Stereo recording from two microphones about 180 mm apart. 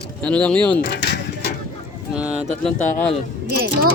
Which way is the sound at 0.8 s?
65° left (ahead or behind).